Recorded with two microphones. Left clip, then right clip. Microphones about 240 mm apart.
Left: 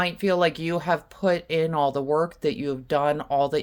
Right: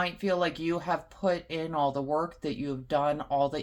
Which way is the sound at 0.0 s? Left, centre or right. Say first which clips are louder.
Left 6 dB; left.